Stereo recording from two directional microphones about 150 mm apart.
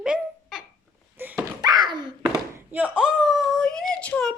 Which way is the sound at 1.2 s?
10° right (ahead or behind).